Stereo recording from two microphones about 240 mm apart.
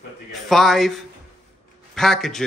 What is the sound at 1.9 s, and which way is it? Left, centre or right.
Speech, centre.